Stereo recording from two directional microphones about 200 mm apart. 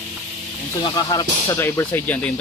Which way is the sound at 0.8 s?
20° left (ahead or behind).